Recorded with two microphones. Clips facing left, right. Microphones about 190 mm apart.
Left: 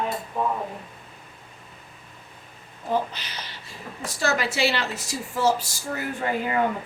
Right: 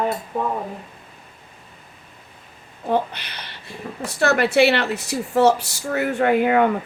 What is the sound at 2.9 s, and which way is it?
Speech, 60° right (ahead or behind).